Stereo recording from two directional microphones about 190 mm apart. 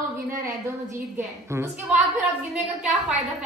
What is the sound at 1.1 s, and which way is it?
Speech, 15° right (ahead or behind).